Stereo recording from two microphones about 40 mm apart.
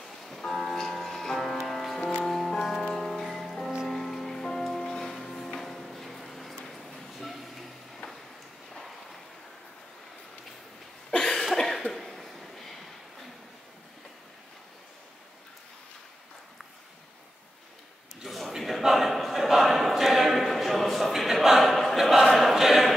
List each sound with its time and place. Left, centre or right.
0.0 s music: centre
6.7 s train: centre
8.0 s a sound: left
11.1 s cough: left
11.5 s cough: centre
11.9 s a sound: centre
18.2 s a man's voice: centre
21.2 s choir: centre